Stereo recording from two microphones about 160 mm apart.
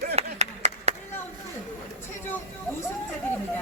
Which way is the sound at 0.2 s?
40° right (ahead or behind).